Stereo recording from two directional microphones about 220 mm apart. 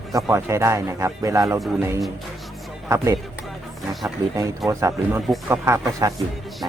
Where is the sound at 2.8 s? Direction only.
15° right (ahead or behind).